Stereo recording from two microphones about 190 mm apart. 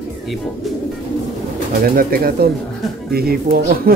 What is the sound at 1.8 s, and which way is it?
Speech, 50° right (ahead or behind).